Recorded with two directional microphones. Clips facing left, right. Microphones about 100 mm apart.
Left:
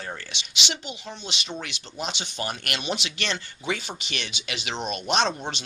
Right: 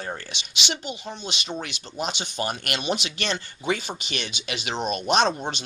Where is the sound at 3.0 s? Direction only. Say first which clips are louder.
Right 2 dB; 45° right (ahead or behind).